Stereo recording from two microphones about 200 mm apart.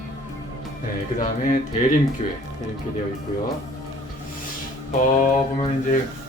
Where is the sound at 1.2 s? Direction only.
40° left (ahead or behind).